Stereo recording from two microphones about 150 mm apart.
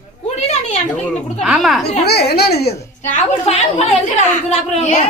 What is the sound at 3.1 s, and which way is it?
A woman's voice, 45° left (ahead or behind).